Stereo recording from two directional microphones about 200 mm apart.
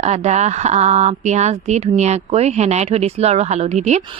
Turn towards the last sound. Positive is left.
turn(degrees=-35)  # may be behind; listen again after turning